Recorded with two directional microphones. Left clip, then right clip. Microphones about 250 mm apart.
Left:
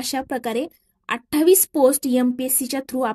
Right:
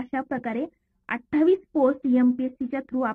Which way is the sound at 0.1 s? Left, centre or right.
Left.